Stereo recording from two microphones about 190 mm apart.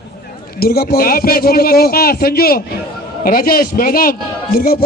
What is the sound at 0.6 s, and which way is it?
A man's voice, 50° left (ahead or behind).